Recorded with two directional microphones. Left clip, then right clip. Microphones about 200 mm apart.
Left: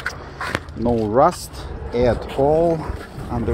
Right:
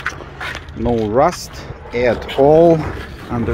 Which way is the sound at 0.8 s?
Centre (ahead or behind).